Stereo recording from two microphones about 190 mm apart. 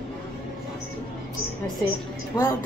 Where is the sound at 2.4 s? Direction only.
20° left (ahead or behind).